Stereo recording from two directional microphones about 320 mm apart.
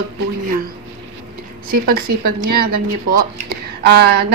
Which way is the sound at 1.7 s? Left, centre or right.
Right.